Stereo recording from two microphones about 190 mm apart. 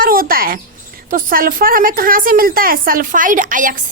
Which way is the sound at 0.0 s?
50° right (ahead or behind).